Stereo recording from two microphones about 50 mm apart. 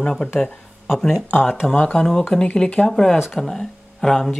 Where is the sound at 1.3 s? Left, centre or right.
Centre.